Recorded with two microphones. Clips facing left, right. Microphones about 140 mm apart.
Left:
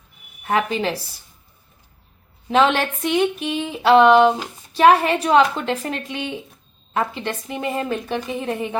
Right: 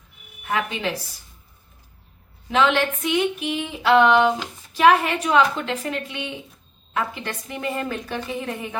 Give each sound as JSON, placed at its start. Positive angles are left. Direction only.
{"t": 0.4, "sound": "speech", "side_deg": 35}
{"t": 2.5, "sound": "a woman's voice", "side_deg": 35}